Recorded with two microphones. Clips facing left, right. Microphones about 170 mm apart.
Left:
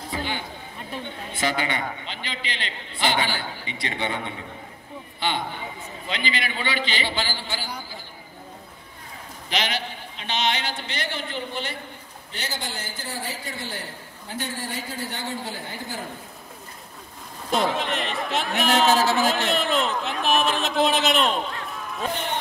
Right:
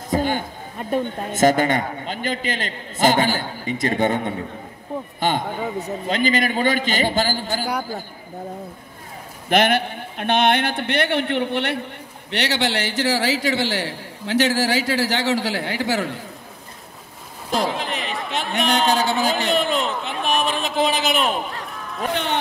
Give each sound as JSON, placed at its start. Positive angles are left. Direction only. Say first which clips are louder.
{"t": 0.1, "sound": "a man's voice", "louder": "right 10 dB", "side_deg": -45}
{"t": 9.5, "sound": "a man's voice", "louder": "right 10 dB", "side_deg": -55}
{"t": 17.5, "sound": "a man's voice", "louder": "right 1 dB", "side_deg": 0}
{"t": 22.1, "sound": "speech", "louder": "right 8 dB", "side_deg": -85}